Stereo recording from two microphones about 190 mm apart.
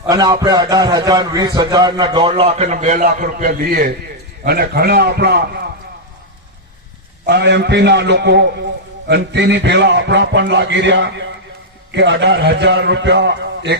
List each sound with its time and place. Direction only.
0.1 s a man's voice: 20° right (ahead or behind)
2.3 s a man's voice: 35° right (ahead or behind); by 5.4 s 60° right (ahead or behind)
7.3 s a man's voice: 65° right (ahead or behind)